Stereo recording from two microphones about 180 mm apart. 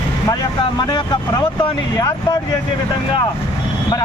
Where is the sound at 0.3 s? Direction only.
25° left (ahead or behind).